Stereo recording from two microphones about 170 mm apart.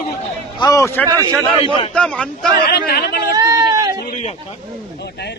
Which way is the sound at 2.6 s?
65° left (ahead or behind).